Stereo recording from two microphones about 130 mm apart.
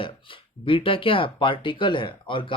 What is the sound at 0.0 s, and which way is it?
Speech, 45° left (ahead or behind).